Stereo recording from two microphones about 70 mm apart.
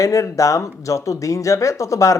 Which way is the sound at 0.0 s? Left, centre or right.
Left.